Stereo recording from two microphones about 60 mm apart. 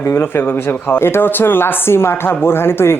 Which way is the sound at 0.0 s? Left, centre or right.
Left.